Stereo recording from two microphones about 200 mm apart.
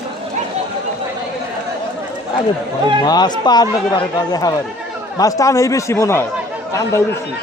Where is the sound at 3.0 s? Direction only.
20° left (ahead or behind).